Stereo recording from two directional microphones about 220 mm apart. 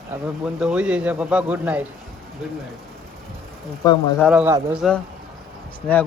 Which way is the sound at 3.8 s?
15° left (ahead or behind).